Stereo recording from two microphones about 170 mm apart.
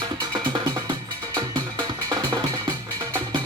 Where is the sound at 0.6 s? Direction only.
20° right (ahead or behind).